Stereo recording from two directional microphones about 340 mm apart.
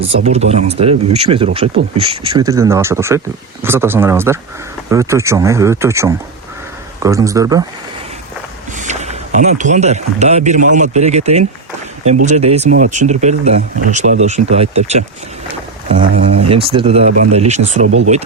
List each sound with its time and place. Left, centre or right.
0.0 s speech: centre
8.8 s speech: centre
17.8 s speech: right